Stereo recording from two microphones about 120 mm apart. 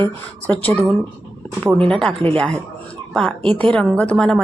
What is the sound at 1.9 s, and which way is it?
A woman's voice, 10° left (ahead or behind).